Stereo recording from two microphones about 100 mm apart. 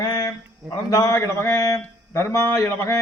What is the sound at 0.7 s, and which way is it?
A man's voice, 40° left (ahead or behind).